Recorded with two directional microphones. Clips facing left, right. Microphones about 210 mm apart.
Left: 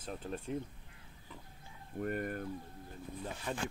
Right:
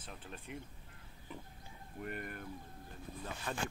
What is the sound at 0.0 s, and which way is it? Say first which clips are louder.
Speech: left 9 dB; 40° left (ahead or behind).